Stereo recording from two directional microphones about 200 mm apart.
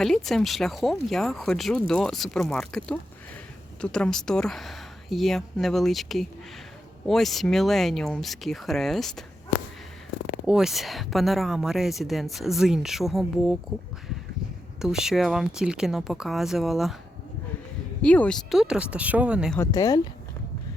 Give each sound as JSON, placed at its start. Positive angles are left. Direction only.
{"t": 0.0, "sound": "speech", "side_deg": 0}
{"t": 10.4, "sound": "speech", "side_deg": -5}
{"t": 14.8, "sound": "speech", "side_deg": 0}
{"t": 18.0, "sound": "speech", "side_deg": 5}
{"t": 19.5, "sound": "speech", "side_deg": 15}